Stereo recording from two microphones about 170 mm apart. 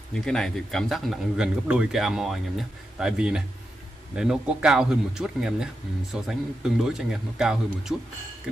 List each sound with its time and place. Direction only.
0.1 s speech: 5° left (ahead or behind)